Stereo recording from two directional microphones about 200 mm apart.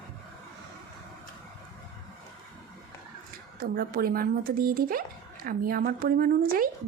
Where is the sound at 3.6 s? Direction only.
45° right (ahead or behind).